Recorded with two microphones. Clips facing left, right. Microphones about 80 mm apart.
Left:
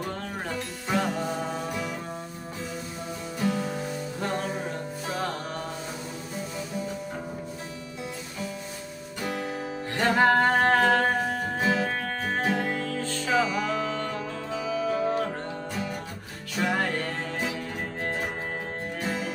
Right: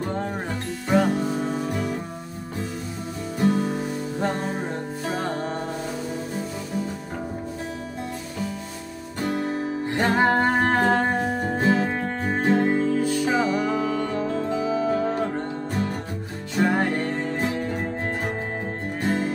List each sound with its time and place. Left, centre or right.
0.8 s music: centre
1.7 s music: right
3.3 s music: right
9.2 s music: right; by 11.5 s centre
11.6 s music: right
12.9 s music: centre
14.1 s music: right
16.5 s music: right
19.0 s music: right